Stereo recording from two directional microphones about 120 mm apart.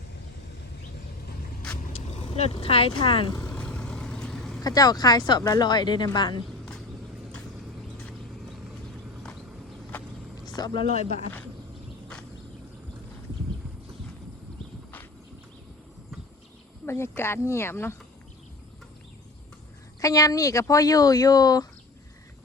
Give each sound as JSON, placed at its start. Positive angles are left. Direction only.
{"t": 1.9, "sound": "zipper", "side_deg": 70}
{"t": 2.3, "sound": "speech", "side_deg": 55}
{"t": 3.4, "sound": "vehicle", "side_deg": 10}
{"t": 4.6, "sound": "speech", "side_deg": 30}
{"t": 10.4, "sound": "vehicle", "side_deg": 35}
{"t": 16.8, "sound": "speech", "side_deg": 20}
{"t": 20.0, "sound": "speech", "side_deg": 30}